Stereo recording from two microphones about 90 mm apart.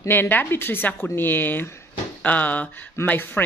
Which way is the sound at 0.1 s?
20° left (ahead or behind).